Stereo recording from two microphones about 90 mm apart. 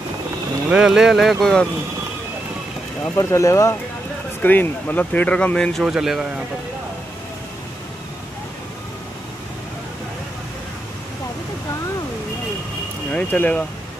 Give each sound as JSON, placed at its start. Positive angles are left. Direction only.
{"t": 0.7, "sound": "speech", "side_deg": -10}
{"t": 3.2, "sound": "speech", "side_deg": 35}
{"t": 4.4, "sound": "speech", "side_deg": 20}
{"t": 5.9, "sound": "speech", "side_deg": -5}
{"t": 13.1, "sound": "speech", "side_deg": 20}